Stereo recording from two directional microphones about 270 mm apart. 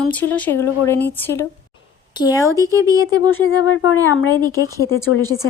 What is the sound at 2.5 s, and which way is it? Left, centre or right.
Speech, centre.